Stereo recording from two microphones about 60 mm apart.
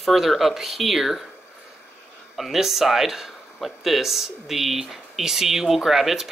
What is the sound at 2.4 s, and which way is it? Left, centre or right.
Speech, centre.